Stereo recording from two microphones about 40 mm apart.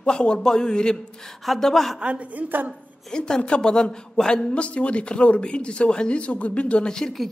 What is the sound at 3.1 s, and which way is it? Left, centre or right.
Speech, left.